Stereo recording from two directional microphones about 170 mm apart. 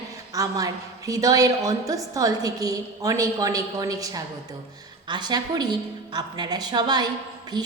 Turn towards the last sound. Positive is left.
turn(degrees=-25)  # may be behind; listen again after turning